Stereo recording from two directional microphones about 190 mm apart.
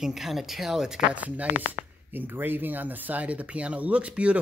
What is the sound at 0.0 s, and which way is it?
Speech, centre (ahead or behind).